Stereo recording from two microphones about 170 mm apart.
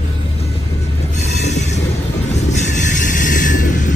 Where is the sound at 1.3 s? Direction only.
40° left (ahead or behind).